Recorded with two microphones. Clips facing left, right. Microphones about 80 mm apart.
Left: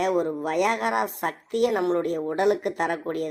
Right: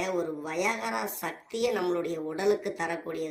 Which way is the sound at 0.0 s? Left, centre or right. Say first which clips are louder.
Left 7 dB; left.